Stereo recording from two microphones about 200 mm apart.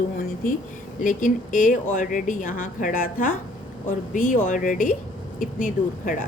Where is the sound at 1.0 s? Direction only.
40° left (ahead or behind).